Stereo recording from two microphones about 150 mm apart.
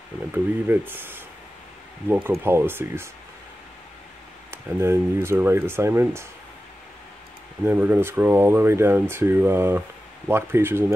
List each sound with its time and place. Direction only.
0.3 s speech: 15° right (ahead or behind)
4.5 s speech: 15° right (ahead or behind)
7.6 s speech: 10° right (ahead or behind)